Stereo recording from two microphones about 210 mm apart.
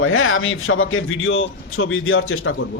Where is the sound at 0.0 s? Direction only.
70° left (ahead or behind).